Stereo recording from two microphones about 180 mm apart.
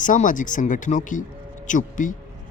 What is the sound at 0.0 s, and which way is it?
Speech, 45° left (ahead or behind).